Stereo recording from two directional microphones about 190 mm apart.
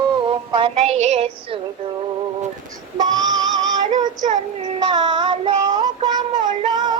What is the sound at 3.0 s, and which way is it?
Synthetic singing, 20° right (ahead or behind).